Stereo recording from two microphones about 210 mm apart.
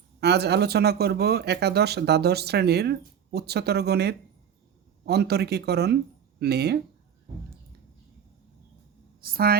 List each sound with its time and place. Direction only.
0.2 s speech: 50° right (ahead or behind)
9.2 s speech: 45° right (ahead or behind)